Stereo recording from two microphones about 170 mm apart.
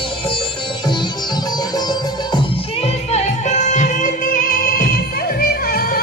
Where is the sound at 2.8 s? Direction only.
40° left (ahead or behind); by 6.0 s 60° left (ahead or behind).